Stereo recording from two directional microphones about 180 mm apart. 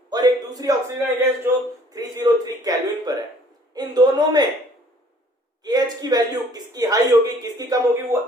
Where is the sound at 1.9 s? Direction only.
20° right (ahead or behind).